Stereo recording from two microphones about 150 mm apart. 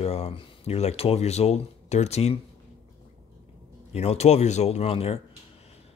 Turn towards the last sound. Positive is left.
turn(degrees=45)  # may be behind; listen again after turning